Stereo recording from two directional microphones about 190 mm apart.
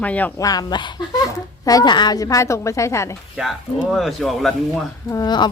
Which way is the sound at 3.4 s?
Centre (ahead or behind).